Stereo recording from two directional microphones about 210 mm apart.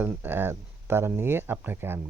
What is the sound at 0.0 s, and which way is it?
A man's voice, 10° right (ahead or behind).